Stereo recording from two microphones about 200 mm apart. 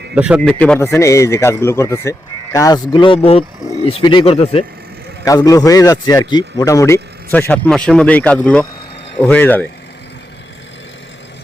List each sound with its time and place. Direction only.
0.1 s speech: 5° right (ahead or behind); by 4.6 s 30° left (ahead or behind)
5.2 s speech: 15° left (ahead or behind)